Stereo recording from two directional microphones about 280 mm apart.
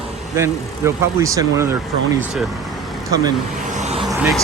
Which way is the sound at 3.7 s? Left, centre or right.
Right.